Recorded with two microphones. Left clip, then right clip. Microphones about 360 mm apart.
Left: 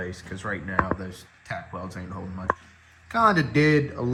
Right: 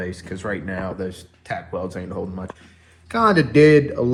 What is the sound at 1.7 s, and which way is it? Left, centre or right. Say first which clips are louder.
Speech: right 9 dB; right.